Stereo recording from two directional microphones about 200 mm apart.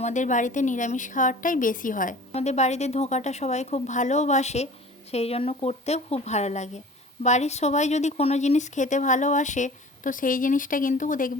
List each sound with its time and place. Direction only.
0.0 s speech: 40° left (ahead or behind)